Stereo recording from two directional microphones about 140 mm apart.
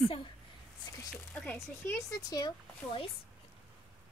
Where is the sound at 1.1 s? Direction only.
10° left (ahead or behind).